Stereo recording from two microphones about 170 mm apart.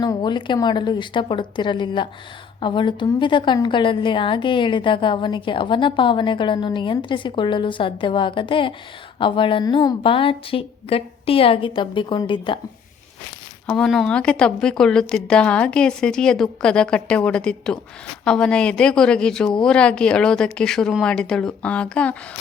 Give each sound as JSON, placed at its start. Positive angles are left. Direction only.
{"t": 0.0, "sound": "a woman's voice", "side_deg": 25}
{"t": 13.7, "sound": "a woman's voice", "side_deg": 5}